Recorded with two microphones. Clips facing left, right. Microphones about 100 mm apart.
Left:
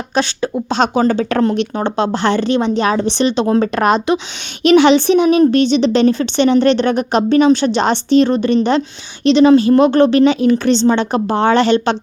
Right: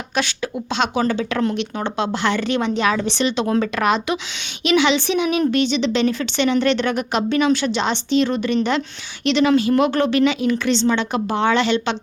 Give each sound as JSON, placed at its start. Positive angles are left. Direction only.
{"t": 0.1, "sound": "speech", "side_deg": 30}